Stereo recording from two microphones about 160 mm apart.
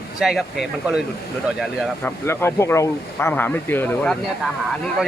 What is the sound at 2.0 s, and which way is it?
Speech, 15° left (ahead or behind).